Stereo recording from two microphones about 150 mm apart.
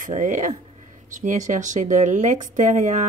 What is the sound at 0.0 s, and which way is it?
A woman's voice, 55° right (ahead or behind).